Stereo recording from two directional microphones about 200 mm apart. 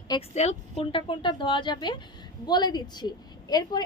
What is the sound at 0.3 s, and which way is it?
A woman's voice, 35° left (ahead or behind).